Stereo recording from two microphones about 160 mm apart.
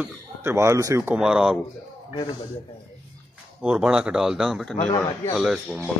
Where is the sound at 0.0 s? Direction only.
15° right (ahead or behind).